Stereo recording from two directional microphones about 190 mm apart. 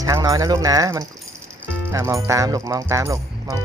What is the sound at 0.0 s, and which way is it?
Speech, 20° right (ahead or behind).